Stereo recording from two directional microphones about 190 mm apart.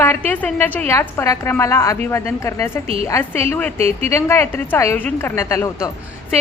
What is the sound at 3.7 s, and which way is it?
Speech, 35° right (ahead or behind).